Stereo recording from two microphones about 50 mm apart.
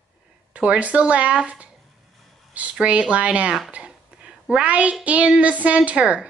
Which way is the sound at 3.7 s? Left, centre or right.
Right.